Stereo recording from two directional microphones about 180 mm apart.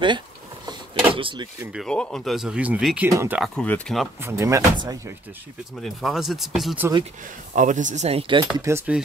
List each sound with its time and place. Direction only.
0.7 s vehicle: 25° right (ahead or behind)
1.6 s speech: 5° right (ahead or behind)
3.5 s speech: 5° left (ahead or behind)
4.2 s speech: 15° right (ahead or behind)
5.8 s speech: centre (ahead or behind)
7.5 s speech: 45° right (ahead or behind)
8.5 s speech: 15° right (ahead or behind)